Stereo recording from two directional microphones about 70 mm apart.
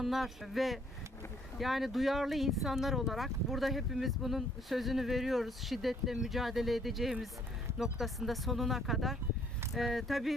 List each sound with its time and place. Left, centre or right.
0.0 s speech: centre